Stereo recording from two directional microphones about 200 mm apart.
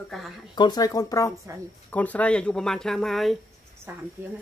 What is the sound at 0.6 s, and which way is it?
Speech, 20° left (ahead or behind).